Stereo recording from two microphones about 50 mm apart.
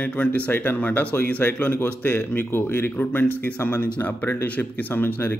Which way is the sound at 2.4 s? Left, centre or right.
Left.